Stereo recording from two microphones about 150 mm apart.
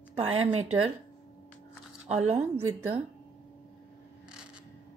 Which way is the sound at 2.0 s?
45° right (ahead or behind).